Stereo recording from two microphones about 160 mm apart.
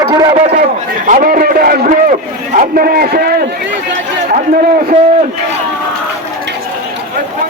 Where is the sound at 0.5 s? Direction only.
60° right (ahead or behind).